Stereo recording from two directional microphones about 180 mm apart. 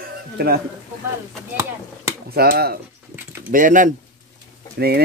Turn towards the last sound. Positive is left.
turn(degrees=-60)  # may be behind; listen again after turning